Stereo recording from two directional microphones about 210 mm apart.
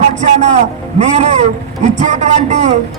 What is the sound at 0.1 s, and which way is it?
Speech, 35° right (ahead or behind).